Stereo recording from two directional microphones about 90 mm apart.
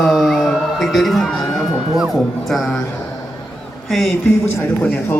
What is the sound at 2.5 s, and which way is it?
Speech, centre (ahead or behind).